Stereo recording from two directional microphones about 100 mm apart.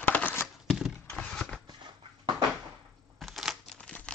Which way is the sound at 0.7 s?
Centre (ahead or behind).